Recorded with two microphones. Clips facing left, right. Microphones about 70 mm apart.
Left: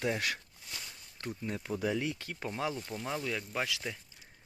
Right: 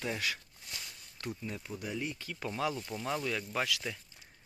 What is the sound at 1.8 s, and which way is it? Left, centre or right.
Speech, left.